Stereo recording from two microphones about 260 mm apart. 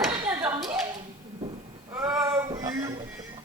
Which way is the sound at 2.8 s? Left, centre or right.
Right.